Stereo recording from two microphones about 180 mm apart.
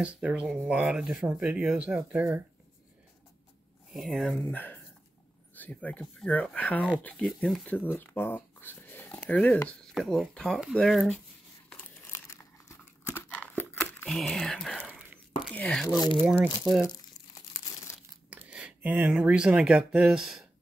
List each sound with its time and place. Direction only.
0.0 s speech: 5° right (ahead or behind)
3.9 s speech: centre (ahead or behind)
11.7 s crumpling: 10° left (ahead or behind)
14.9 s a sound: 5° right (ahead or behind)
15.5 s speech: 5° left (ahead or behind)
15.9 s speech: 25° left (ahead or behind)
16.8 s crumpling: 20° left (ahead or behind)
18.3 s speech: 5° right (ahead or behind)